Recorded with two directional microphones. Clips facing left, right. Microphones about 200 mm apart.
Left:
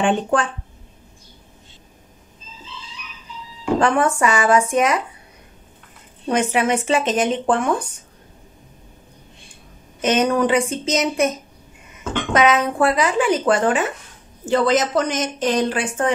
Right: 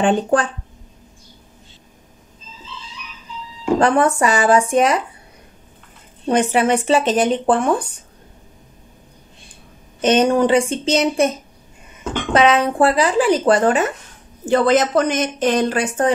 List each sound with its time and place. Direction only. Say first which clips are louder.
0.0 s speech: right 2 dB; 35° right (ahead or behind)
3.8 s speech: right 3 dB; 35° right (ahead or behind)
6.2 s speech: right 3 dB; 30° right (ahead or behind)
10.0 s speech: right 3 dB; 30° right (ahead or behind)
14.4 s a woman's voice: right 3 dB; 55° right (ahead or behind)
15.7 s speech: right 3 dB; 40° right (ahead or behind)